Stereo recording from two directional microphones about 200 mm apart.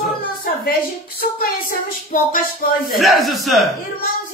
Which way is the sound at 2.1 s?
45° left (ahead or behind).